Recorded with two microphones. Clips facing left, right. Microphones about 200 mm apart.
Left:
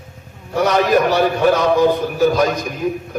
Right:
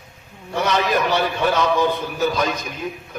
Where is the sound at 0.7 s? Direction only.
45° left (ahead or behind).